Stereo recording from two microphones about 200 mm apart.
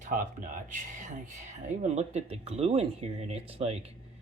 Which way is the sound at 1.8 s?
35° right (ahead or behind).